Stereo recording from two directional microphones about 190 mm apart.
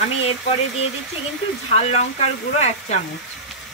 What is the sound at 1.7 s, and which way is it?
Speech, 35° left (ahead or behind).